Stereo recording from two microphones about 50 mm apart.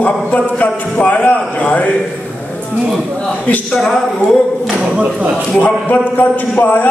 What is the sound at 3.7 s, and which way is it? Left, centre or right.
Speech, centre.